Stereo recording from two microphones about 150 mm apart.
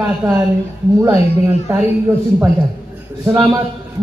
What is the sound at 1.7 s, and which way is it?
Speech, 15° right (ahead or behind).